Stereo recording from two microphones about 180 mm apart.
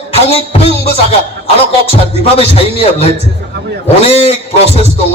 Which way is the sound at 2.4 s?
35° left (ahead or behind).